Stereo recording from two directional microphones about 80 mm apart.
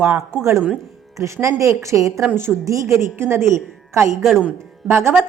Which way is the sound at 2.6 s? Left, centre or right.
Right.